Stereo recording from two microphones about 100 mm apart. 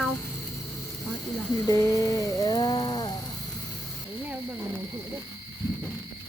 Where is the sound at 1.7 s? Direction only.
35° left (ahead or behind).